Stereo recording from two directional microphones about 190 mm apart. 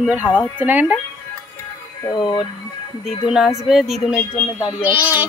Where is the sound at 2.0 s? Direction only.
25° left (ahead or behind).